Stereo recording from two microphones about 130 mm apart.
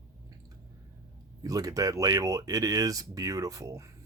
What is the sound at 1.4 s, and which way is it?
Speech, 25° right (ahead or behind).